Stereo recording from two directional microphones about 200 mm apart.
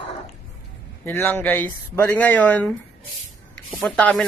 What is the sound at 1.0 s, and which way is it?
Speech, 10° left (ahead or behind).